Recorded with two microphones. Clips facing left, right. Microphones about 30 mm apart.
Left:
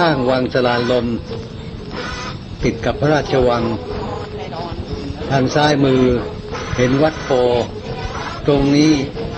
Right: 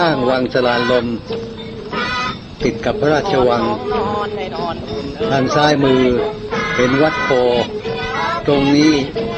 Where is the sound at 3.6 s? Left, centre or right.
Right.